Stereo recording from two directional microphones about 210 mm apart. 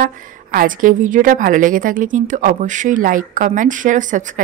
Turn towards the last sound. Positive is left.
turn(degrees=-35)  # may be behind; listen again after turning